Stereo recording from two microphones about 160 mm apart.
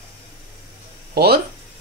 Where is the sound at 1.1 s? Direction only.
80° right.